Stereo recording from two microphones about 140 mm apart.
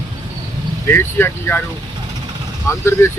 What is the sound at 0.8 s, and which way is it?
Speech, 15° left (ahead or behind).